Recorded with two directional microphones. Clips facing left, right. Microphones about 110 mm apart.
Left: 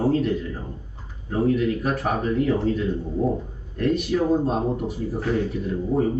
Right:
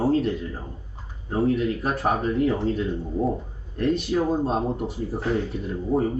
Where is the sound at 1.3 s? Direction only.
25° right (ahead or behind).